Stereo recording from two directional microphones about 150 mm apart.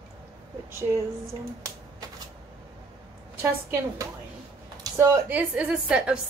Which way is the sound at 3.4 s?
20° right (ahead or behind).